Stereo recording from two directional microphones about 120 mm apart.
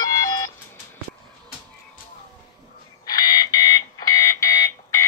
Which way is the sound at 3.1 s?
35° left (ahead or behind).